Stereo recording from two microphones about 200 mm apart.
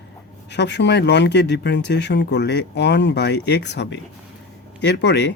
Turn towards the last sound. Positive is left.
turn(degrees=60)  # may be behind; listen again after turning